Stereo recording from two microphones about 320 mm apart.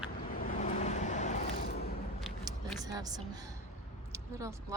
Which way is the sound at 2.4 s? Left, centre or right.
Centre.